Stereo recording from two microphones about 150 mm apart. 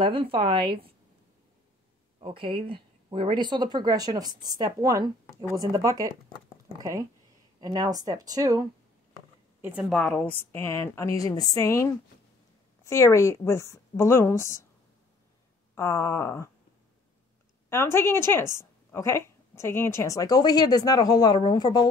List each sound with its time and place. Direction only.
0.0 s speech: 35° right (ahead or behind)
2.1 s speech: 35° right (ahead or behind)
9.6 s a woman's voice: 10° right (ahead or behind); by 14.7 s 20° left (ahead or behind)
15.7 s a woman's voice: 20° left (ahead or behind)
17.6 s a woman's voice: 15° left (ahead or behind)